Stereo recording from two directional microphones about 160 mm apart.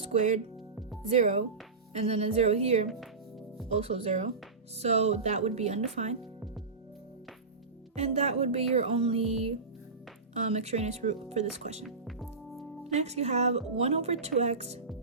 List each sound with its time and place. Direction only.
0.0 s speech: 45° right (ahead or behind)
7.9 s speech: 40° right (ahead or behind)
11.8 s music: centre (ahead or behind)
12.8 s speech: 45° right (ahead or behind)